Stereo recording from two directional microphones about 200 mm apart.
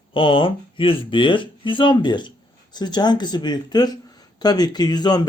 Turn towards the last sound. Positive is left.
turn(degrees=20)  # may be behind; listen again after turning